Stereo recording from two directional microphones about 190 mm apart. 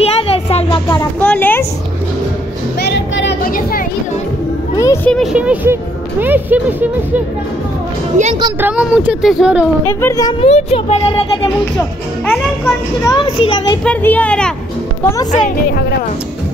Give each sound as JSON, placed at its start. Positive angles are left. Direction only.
{"t": 0.2, "sound": "music", "side_deg": 30}
{"t": 0.8, "sound": "a sound", "side_deg": 10}
{"t": 2.9, "sound": "a sound", "side_deg": 65}
{"t": 3.4, "sound": "a sound", "side_deg": 50}
{"t": 4.7, "sound": "speech", "side_deg": 15}
{"t": 8.5, "sound": "speech", "side_deg": -10}
{"t": 9.8, "sound": "speech", "side_deg": 15}
{"t": 10.4, "sound": "a child's voice", "side_deg": 30}
{"t": 12.3, "sound": "a child's voice", "side_deg": 15}
{"t": 13.8, "sound": "speech", "side_deg": 10}
{"t": 15.0, "sound": "a child's voice", "side_deg": 20}